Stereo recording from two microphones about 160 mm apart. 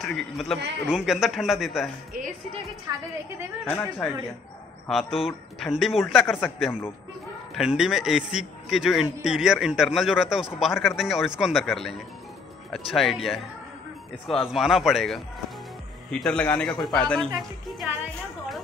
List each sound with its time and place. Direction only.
0.0 s a man's voice: centre (ahead or behind)
2.9 s a woman's voice: 20° right (ahead or behind)
3.6 s speech: 10° left (ahead or behind)
4.8 s a man's voice: centre (ahead or behind)